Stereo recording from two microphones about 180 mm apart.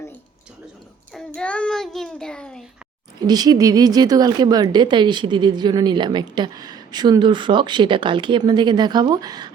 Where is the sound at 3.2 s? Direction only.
20° right (ahead or behind).